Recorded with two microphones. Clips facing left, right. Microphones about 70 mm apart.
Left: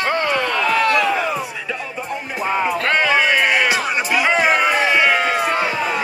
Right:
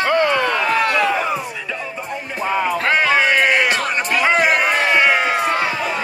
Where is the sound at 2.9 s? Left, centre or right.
Centre.